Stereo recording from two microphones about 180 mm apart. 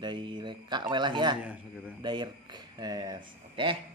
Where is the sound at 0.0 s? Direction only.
25° right (ahead or behind).